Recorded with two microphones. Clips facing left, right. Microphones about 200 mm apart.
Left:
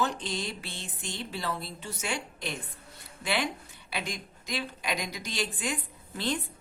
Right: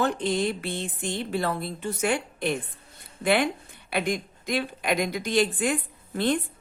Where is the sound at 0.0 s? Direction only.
55° right (ahead or behind).